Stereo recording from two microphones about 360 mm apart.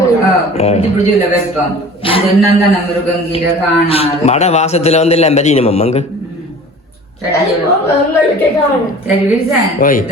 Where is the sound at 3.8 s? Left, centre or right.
Centre.